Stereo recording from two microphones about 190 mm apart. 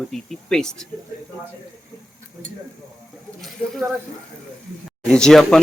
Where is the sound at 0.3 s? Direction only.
5° left (ahead or behind).